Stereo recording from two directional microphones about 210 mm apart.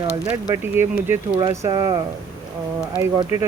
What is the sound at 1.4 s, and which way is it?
Speech, 20° right (ahead or behind).